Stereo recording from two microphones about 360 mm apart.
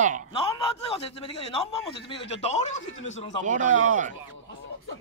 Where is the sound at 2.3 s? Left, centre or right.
Centre.